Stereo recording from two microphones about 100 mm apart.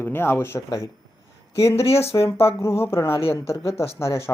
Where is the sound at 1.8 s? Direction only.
80° left.